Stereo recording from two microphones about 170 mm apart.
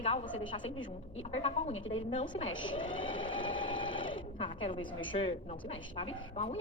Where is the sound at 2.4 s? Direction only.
30° left (ahead or behind).